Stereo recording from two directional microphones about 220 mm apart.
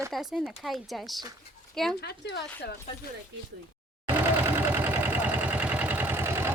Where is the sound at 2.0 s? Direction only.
50° left (ahead or behind).